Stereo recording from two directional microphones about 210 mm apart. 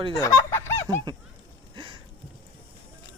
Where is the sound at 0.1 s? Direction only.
15° left (ahead or behind).